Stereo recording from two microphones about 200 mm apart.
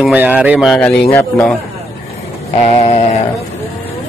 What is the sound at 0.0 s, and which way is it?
Speech, 5° right (ahead or behind).